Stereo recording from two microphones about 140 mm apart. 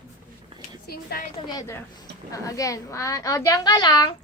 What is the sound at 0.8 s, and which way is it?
Speech, 90° left.